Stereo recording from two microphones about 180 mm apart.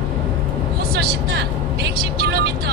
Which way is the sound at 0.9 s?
65° right (ahead or behind).